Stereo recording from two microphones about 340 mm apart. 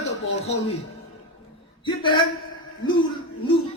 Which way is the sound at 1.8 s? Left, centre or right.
Centre.